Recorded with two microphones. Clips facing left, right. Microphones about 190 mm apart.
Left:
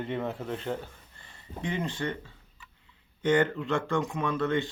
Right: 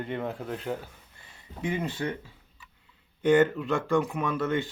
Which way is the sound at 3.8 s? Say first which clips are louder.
Right 5 dB; 15° right (ahead or behind).